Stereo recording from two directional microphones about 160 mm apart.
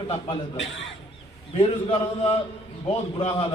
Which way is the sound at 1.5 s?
35° left (ahead or behind).